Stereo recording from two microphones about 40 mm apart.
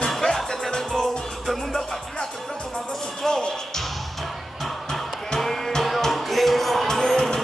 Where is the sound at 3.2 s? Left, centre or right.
Centre.